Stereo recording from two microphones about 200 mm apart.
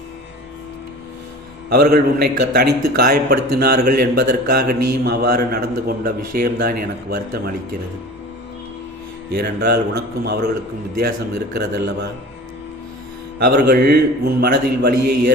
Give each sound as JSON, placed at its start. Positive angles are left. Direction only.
{"t": 1.7, "sound": "a man's voice", "side_deg": -50}
{"t": 9.3, "sound": "a man's voice", "side_deg": -55}
{"t": 11.5, "sound": "a man's voice", "side_deg": -55}
{"t": 13.4, "sound": "a man's voice", "side_deg": -50}